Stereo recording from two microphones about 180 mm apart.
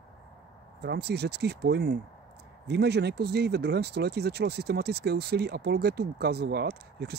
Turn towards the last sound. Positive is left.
turn(degrees=-65)  # may be behind; listen again after turning